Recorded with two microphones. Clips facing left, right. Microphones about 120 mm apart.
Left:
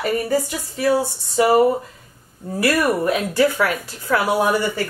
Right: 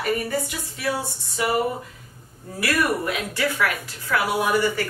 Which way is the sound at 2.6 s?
35° left (ahead or behind).